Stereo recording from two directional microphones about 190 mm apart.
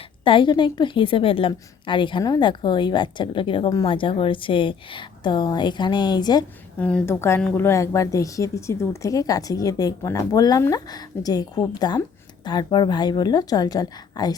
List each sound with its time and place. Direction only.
0.3 s a woman's voice: 25° left (ahead or behind)
6.7 s a woman's voice: 5° left (ahead or behind)